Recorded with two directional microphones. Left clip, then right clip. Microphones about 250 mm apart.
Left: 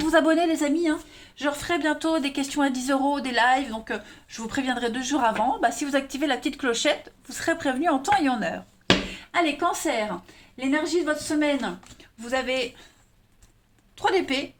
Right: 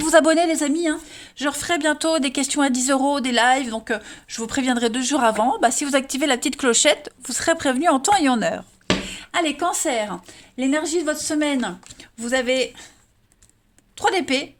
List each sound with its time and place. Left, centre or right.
0.0 s a woman's voice: right
13.9 s a woman's voice: right